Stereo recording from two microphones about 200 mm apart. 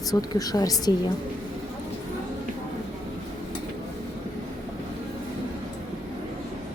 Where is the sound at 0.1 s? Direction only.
20° left (ahead or behind).